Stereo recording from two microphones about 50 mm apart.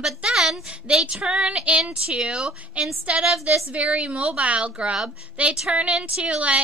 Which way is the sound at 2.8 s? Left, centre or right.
Right.